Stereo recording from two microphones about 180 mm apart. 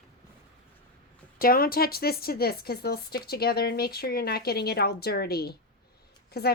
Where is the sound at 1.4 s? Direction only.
55° left (ahead or behind).